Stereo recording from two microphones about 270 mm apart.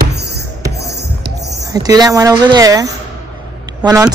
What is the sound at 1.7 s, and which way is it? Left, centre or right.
Speech, centre.